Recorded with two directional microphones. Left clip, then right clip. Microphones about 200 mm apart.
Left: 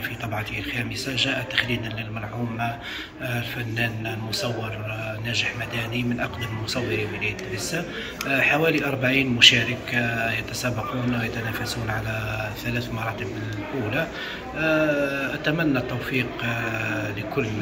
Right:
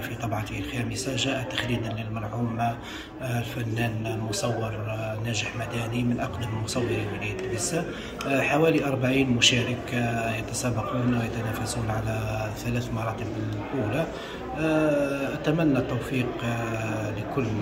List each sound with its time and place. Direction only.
0.7 s a man's voice: 10° right (ahead or behind)
6.9 s a man's voice: 10° right (ahead or behind)
14.6 s a man's voice: 5° right (ahead or behind)